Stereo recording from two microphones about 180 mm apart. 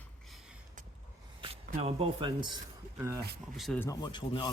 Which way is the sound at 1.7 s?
35° right (ahead or behind).